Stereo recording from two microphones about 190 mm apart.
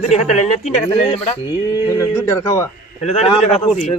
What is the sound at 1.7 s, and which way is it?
Speech, 20° left (ahead or behind).